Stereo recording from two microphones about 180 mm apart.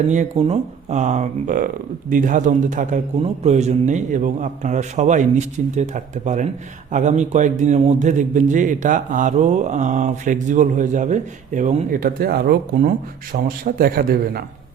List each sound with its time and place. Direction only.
0.1 s a man's voice: 40° right (ahead or behind); by 12.9 s 60° right (ahead or behind)
13.3 s a man's voice: 50° right (ahead or behind)